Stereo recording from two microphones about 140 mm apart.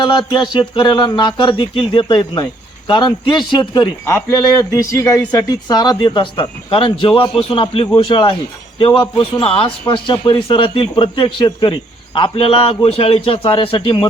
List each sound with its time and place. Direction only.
0.0 s a man's voice: 35° left (ahead or behind)
4.1 s a man's voice: 20° left (ahead or behind); by 14.1 s 35° left (ahead or behind)